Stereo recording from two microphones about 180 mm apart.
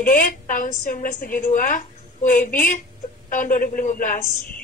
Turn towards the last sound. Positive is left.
turn(degrees=45)  # may be behind; listen again after turning